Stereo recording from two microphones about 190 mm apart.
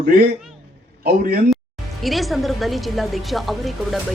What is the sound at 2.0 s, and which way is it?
Speech, centre (ahead or behind).